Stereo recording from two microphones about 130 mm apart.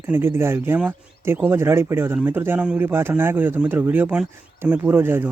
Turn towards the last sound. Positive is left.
turn(degrees=-15)  # may be behind; listen again after turning